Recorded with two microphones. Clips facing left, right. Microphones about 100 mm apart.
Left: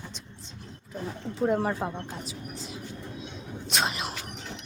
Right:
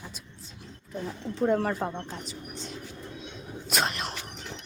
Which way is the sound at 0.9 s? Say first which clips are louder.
Right 1 dB; centre (ahead or behind).